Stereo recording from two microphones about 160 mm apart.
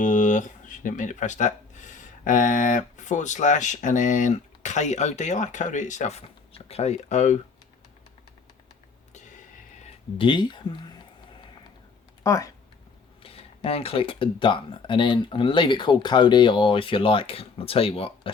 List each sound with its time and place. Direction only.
0.0 s speech: 50° left (ahead or behind)
9.1 s a sound: 50° left (ahead or behind)
9.8 s speech: 30° left (ahead or behind)
12.2 s speech: 20° left (ahead or behind)
13.2 s speech: 35° left (ahead or behind)